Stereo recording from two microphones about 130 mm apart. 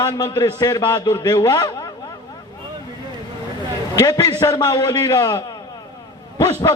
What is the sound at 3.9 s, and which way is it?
A man's voice, 30° left (ahead or behind).